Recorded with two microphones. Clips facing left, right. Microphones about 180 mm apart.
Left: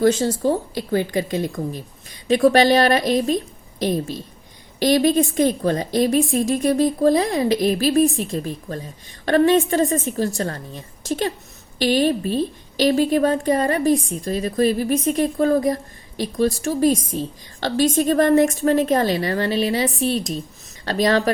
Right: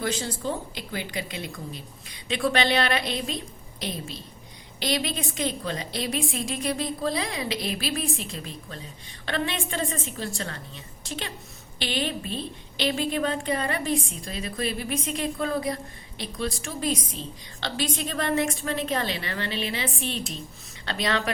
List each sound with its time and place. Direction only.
0.0 s a woman's voice: 45° left (ahead or behind)
4.8 s a woman's voice: 45° left (ahead or behind)